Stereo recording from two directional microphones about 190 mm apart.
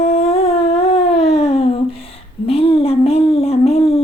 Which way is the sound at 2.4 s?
30° left (ahead or behind).